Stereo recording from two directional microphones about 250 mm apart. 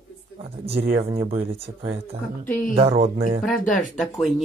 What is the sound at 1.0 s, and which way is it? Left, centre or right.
Speech, right.